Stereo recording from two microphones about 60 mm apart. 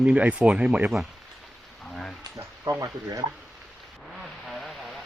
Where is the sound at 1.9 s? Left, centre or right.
Centre.